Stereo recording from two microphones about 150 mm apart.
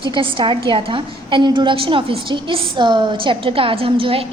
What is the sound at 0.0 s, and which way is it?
A woman's voice, 35° right (ahead or behind).